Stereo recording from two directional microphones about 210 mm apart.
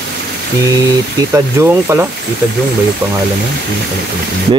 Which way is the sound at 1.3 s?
10° right (ahead or behind).